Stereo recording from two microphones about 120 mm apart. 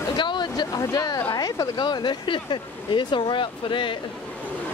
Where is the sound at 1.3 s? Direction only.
35° left (ahead or behind).